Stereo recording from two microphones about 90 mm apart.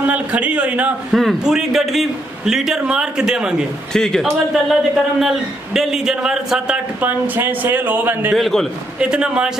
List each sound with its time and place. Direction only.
0.0 s a man's voice: 15° right (ahead or behind)
1.1 s a man's voice: 5° right (ahead or behind)
3.9 s a man's voice: 5° left (ahead or behind)
7.0 s speech: 20° right (ahead or behind)
8.4 s a man's voice: 5° left (ahead or behind)
9.0 s a man's voice: 10° right (ahead or behind)